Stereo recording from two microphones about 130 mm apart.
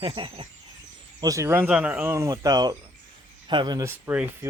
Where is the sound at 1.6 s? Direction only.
10° right (ahead or behind).